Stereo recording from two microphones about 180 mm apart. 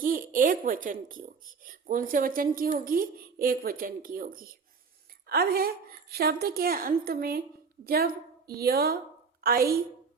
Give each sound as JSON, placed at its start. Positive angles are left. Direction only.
{"t": 0.0, "sound": "a woman's voice", "side_deg": -50}